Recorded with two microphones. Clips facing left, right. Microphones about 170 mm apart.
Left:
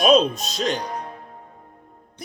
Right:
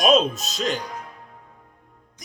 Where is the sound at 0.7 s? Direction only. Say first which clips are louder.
Left 4 dB; 40° left (ahead or behind).